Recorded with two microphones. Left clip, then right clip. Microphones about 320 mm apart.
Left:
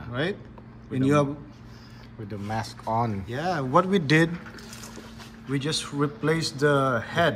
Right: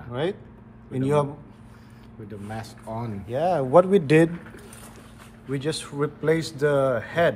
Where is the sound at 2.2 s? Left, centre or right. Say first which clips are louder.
Left 5 dB; centre.